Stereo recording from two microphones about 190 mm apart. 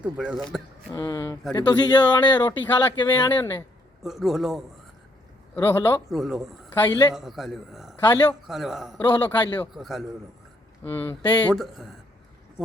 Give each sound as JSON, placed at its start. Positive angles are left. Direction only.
{"t": 0.0, "sound": "speech", "side_deg": -5}
{"t": 0.9, "sound": "speech", "side_deg": 20}
{"t": 4.0, "sound": "speech", "side_deg": 0}
{"t": 5.5, "sound": "speech", "side_deg": 10}
{"t": 6.1, "sound": "speech", "side_deg": 0}
{"t": 6.8, "sound": "speech", "side_deg": 20}
{"t": 7.1, "sound": "speech", "side_deg": 0}
{"t": 8.0, "sound": "speech", "side_deg": 20}
{"t": 8.4, "sound": "speech", "side_deg": 0}
{"t": 9.0, "sound": "speech", "side_deg": 20}
{"t": 9.6, "sound": "speech", "side_deg": 0}
{"t": 10.8, "sound": "speech", "side_deg": 10}
{"t": 11.5, "sound": "speech", "side_deg": 0}